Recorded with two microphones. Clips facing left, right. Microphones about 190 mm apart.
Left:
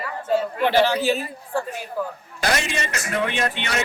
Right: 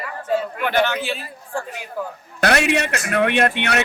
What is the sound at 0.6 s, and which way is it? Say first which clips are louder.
Speech: left 2 dB; 30° left (ahead or behind).